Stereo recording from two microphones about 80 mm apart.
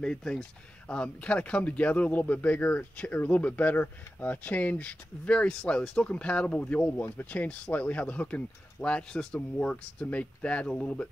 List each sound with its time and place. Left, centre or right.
0.0 s speech: centre